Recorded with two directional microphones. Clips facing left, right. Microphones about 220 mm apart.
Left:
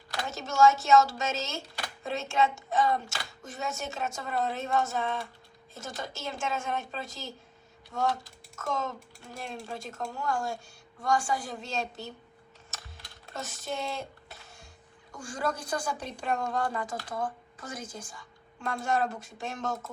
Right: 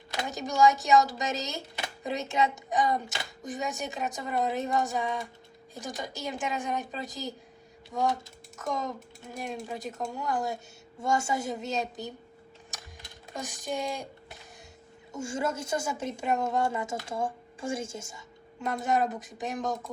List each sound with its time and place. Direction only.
0.1 s a woman's voice: 15° right (ahead or behind)
12.7 s a sound: 15° right (ahead or behind)
13.3 s a woman's voice: 15° right (ahead or behind)